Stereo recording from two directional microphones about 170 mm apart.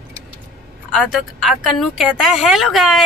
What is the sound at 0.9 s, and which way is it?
Speech, centre (ahead or behind).